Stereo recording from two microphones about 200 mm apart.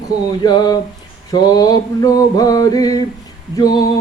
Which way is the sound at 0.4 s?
20° left (ahead or behind).